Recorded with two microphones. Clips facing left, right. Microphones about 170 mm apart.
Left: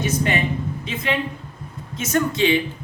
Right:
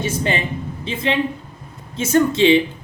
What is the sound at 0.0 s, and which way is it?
A man's voice, 30° right (ahead or behind).